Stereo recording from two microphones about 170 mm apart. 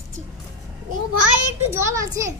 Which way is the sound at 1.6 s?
15° right (ahead or behind).